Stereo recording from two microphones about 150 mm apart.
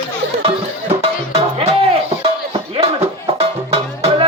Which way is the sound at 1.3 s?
40° right (ahead or behind).